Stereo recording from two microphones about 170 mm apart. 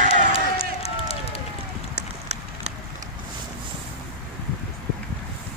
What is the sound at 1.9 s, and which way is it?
Run, 40° right (ahead or behind).